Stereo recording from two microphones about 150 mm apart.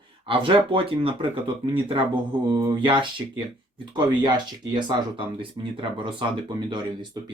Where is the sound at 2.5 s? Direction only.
30° right (ahead or behind).